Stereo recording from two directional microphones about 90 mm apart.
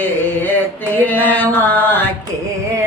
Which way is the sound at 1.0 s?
20° left (ahead or behind).